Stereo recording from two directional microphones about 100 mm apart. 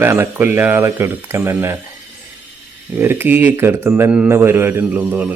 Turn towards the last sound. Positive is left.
turn(degrees=-15)  # may be behind; listen again after turning